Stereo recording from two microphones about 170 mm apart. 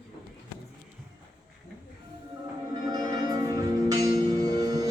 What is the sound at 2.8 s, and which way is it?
Music, 20° right (ahead or behind).